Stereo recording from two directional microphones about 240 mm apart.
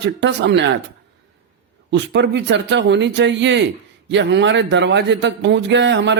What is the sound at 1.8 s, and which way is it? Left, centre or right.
Speech, right.